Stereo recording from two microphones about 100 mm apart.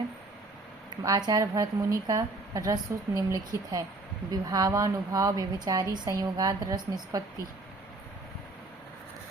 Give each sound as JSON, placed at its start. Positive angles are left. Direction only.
{"t": 1.0, "sound": "a woman's voice", "side_deg": -40}